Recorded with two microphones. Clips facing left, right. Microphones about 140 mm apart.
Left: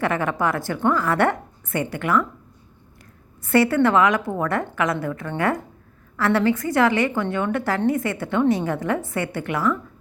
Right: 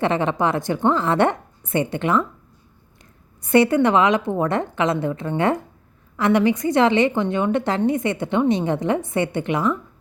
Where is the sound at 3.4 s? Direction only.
20° right (ahead or behind).